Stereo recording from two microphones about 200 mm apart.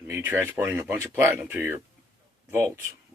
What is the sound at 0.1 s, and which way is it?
Speech, 10° right (ahead or behind).